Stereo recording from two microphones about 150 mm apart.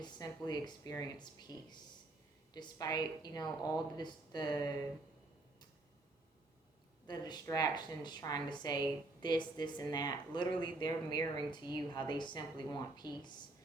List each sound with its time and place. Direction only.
0.0 s speech: 30° left (ahead or behind)
7.1 s speech: 30° left (ahead or behind)